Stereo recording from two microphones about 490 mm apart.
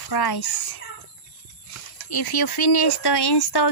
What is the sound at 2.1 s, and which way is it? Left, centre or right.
A child's voice, left.